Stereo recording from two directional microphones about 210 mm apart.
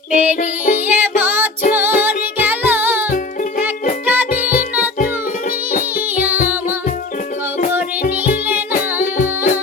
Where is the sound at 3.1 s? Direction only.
40° left (ahead or behind).